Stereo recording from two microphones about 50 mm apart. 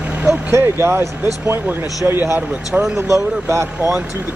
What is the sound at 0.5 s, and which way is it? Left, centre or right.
Speech, right.